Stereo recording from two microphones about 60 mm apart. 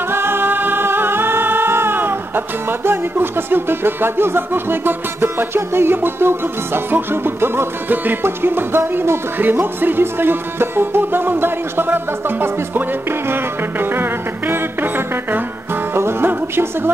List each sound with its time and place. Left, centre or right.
0.1 s music: right